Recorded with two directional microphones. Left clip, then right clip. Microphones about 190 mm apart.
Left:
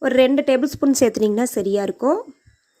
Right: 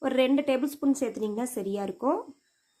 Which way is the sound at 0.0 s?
25° left (ahead or behind).